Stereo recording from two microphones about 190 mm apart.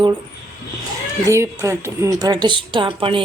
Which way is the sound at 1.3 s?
15° right (ahead or behind).